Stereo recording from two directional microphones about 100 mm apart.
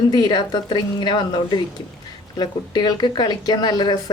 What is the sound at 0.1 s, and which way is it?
Speech, 45° left (ahead or behind).